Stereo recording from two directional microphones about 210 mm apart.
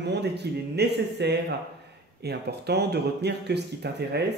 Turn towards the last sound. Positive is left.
turn(degrees=-50)  # may be behind; listen again after turning